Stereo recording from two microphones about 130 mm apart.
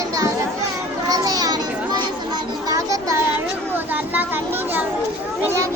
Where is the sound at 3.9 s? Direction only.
15° right (ahead or behind).